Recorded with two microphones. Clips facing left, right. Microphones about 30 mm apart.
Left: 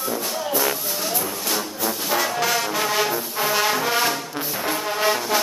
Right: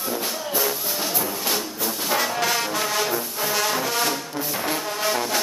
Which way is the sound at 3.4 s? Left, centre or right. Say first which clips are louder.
Left 3 dB; centre.